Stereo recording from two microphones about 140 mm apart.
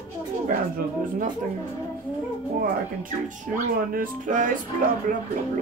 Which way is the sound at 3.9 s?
70° right (ahead or behind).